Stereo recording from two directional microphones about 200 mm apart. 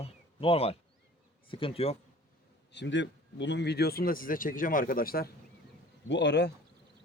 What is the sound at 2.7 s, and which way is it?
Speech, 60° left (ahead or behind).